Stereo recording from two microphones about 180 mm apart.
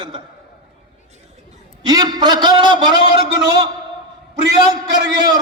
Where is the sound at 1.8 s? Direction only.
25° right (ahead or behind).